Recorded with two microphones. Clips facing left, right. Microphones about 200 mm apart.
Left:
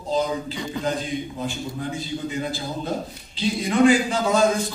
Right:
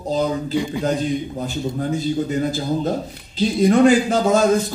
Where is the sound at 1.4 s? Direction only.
40° right (ahead or behind).